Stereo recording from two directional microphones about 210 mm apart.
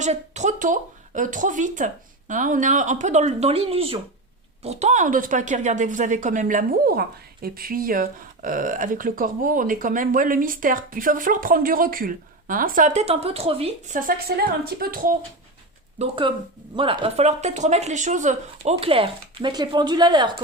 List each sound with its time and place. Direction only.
0.0 s speech: 35° right (ahead or behind)
16.0 s speech: 25° right (ahead or behind)